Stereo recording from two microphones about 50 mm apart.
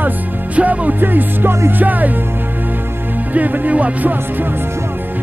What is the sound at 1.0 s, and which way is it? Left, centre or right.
Music, right.